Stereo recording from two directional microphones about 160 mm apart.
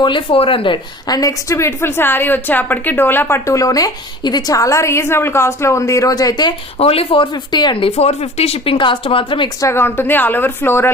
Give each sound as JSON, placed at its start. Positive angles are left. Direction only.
{"t": 0.0, "sound": "a woman's voice", "side_deg": 30}
{"t": 6.7, "sound": "speech", "side_deg": 35}
{"t": 9.6, "sound": "a woman's voice", "side_deg": 15}